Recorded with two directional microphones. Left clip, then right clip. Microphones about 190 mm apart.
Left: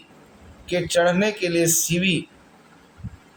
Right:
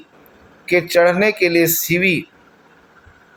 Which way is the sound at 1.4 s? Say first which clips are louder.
Right 7 dB; 25° left (ahead or behind).